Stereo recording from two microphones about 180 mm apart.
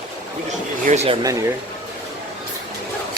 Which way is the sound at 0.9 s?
35° right (ahead or behind).